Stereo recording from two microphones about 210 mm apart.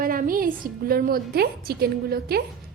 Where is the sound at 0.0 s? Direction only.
40° right (ahead or behind).